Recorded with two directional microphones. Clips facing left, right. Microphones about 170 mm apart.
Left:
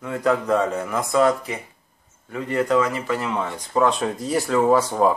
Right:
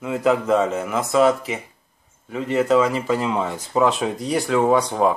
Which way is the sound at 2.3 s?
20° right (ahead or behind).